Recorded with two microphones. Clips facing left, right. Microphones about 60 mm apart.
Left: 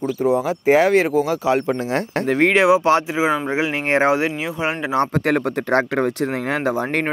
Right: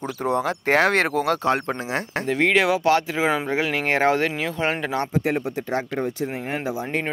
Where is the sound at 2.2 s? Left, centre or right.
Left.